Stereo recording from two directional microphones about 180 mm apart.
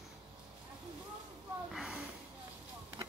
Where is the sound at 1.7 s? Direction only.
5° right (ahead or behind).